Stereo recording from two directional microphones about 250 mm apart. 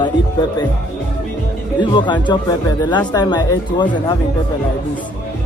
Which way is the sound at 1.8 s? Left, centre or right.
Centre.